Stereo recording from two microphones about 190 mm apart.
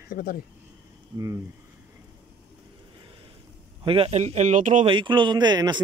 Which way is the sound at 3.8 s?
30° right (ahead or behind).